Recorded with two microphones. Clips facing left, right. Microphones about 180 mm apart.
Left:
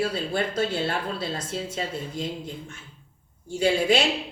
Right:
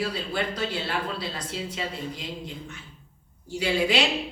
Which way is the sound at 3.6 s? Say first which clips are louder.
Left 3 dB; 45° left (ahead or behind).